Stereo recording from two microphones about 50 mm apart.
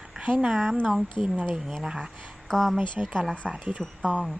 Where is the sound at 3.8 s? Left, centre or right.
Centre.